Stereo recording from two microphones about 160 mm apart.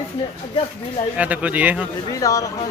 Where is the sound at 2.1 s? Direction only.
20° left (ahead or behind).